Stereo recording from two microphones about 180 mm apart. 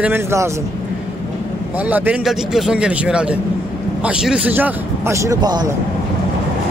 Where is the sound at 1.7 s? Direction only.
10° right (ahead or behind).